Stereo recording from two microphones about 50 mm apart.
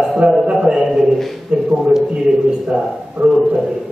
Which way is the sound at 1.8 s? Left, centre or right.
Centre.